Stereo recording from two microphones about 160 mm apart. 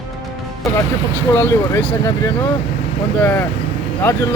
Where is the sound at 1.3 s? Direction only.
15° left (ahead or behind).